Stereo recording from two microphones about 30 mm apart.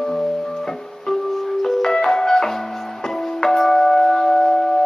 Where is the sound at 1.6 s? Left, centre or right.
Centre.